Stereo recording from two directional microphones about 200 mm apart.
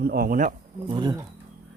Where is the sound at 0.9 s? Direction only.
20° right (ahead or behind).